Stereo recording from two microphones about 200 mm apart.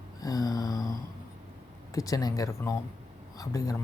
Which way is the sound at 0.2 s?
20° left (ahead or behind).